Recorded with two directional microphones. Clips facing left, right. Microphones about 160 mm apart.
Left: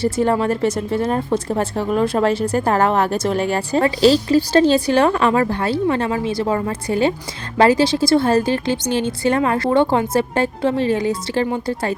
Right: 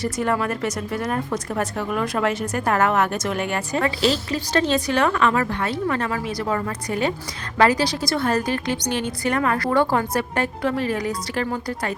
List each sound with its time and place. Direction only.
0.0 s a woman's voice: 30° left (ahead or behind)